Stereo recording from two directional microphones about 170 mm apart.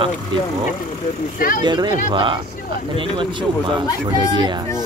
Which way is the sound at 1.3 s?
55° left (ahead or behind).